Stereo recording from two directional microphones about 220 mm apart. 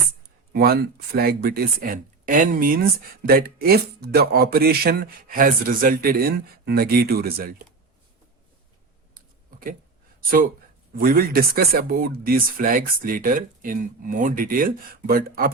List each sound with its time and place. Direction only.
0.5 s speech: 45° right (ahead or behind)
9.1 s a sound: 40° right (ahead or behind)
10.2 s speech: 40° right (ahead or behind)